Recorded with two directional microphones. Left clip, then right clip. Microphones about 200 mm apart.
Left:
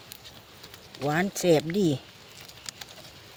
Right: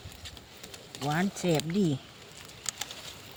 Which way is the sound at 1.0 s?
60° left (ahead or behind).